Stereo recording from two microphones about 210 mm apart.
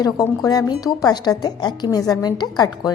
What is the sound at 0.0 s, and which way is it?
A woman's voice, 20° left (ahead or behind).